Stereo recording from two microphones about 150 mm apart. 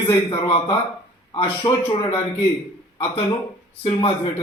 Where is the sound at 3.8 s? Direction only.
35° left (ahead or behind).